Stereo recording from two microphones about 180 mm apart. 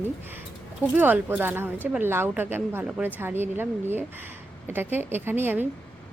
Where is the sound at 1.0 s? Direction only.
10° right (ahead or behind).